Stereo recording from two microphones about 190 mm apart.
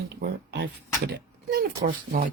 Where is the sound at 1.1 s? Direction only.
50° right (ahead or behind).